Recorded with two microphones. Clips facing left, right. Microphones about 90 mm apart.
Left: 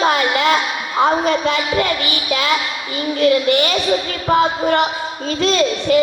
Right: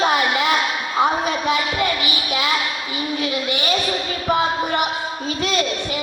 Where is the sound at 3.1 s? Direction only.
70° left (ahead or behind).